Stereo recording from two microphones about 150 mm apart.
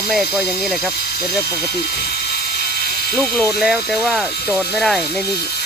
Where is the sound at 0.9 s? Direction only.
90° left.